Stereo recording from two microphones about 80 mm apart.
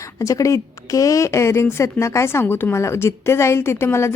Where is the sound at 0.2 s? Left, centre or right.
Left.